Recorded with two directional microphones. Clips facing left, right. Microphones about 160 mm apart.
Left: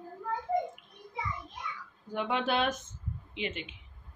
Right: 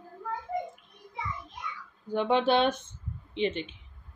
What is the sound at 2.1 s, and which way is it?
Speech, 30° right (ahead or behind).